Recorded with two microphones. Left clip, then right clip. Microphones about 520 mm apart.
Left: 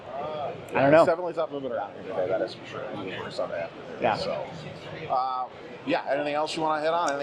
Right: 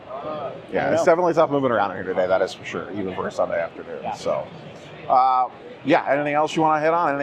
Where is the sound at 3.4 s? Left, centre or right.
Right.